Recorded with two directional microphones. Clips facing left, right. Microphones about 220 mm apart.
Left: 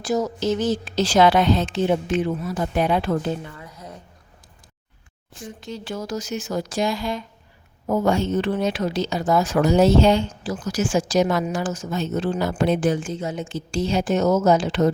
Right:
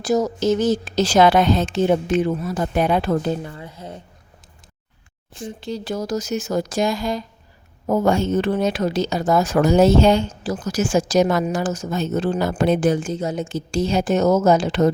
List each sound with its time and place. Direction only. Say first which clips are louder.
0.0 s speech: right 3 dB; 40° right (ahead or behind)
5.4 s speech: right 5 dB; 30° right (ahead or behind)